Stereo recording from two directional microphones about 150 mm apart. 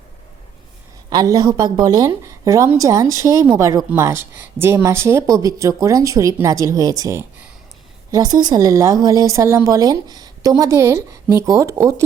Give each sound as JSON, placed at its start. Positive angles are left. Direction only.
{"t": 1.1, "sound": "speech", "side_deg": -25}